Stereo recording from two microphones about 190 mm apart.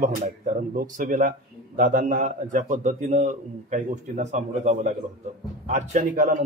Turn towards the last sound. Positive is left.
turn(degrees=-40)  # may be behind; listen again after turning